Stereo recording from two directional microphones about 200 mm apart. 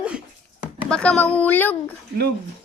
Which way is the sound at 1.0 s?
5° left (ahead or behind).